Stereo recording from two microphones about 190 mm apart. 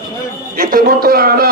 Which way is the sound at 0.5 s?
50° right (ahead or behind).